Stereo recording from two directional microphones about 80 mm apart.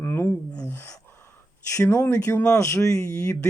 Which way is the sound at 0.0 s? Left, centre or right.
Left.